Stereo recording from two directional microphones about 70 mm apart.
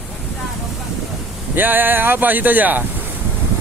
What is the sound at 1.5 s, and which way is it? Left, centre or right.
Speech, right.